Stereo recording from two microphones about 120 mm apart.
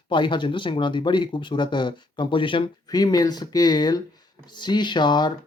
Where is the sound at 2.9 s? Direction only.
35° left (ahead or behind).